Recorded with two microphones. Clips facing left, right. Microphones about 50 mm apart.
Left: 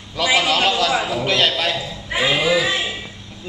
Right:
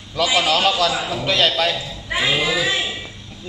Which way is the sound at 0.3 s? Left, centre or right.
Left.